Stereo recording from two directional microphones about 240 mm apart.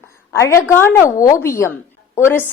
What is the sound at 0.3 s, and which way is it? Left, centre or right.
A woman's voice, centre.